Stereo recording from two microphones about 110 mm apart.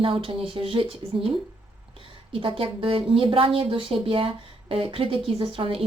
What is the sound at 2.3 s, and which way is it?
Speech, 55° right (ahead or behind).